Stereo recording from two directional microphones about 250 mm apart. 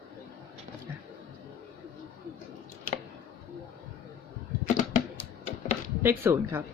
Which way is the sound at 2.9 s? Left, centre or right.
Left.